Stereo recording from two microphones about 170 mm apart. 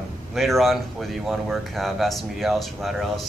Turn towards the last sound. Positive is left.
turn(degrees=0)  # may be behind; listen again after turning